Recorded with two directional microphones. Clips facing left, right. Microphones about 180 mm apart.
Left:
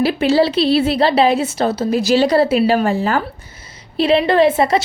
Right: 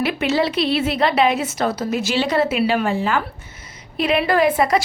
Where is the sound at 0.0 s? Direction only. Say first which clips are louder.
Left 5 dB; 30° left (ahead or behind).